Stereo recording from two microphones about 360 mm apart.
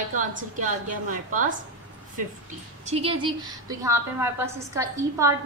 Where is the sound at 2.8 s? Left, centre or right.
Centre.